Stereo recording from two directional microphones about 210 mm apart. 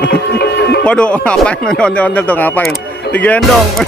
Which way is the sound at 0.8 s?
5° left (ahead or behind).